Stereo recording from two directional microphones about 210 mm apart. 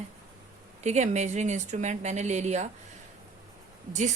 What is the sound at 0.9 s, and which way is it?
A woman's voice, 35° right (ahead or behind).